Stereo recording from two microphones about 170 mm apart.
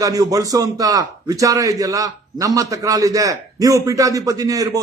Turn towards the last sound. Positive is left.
turn(degrees=-20)  # may be behind; listen again after turning